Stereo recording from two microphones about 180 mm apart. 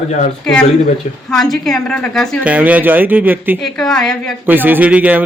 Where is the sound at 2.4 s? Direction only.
10° right (ahead or behind).